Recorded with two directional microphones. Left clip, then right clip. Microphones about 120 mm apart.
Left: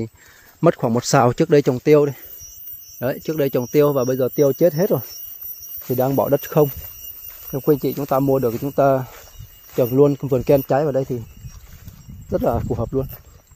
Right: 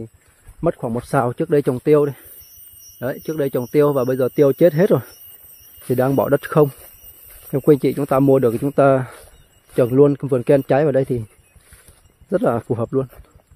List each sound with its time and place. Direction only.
0.6 s speech: 40° left (ahead or behind)
1.5 s speech: 5° left (ahead or behind); by 4.9 s 25° right (ahead or behind)
6.0 s speech: 25° right (ahead or behind)
7.5 s speech: 40° right (ahead or behind)
8.2 s speech: 45° right (ahead or behind); by 10.6 s 10° right (ahead or behind)
10.9 s speech: 40° right (ahead or behind)
12.3 s speech: 30° right (ahead or behind)